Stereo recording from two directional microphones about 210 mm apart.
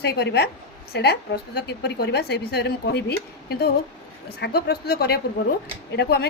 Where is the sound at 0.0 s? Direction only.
50° left (ahead or behind).